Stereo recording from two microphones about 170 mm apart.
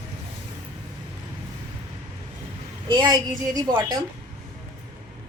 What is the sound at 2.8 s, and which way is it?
A woman's voice, 25° right (ahead or behind).